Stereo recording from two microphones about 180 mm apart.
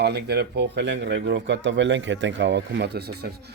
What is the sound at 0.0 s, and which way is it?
Speech, 70° right (ahead or behind).